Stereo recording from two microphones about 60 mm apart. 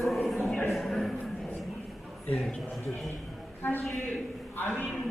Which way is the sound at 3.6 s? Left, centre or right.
Left.